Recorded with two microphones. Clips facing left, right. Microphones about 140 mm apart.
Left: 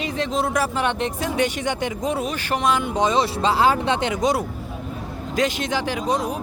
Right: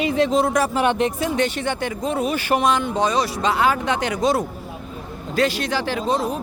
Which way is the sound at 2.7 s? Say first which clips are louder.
Even; 10° left (ahead or behind).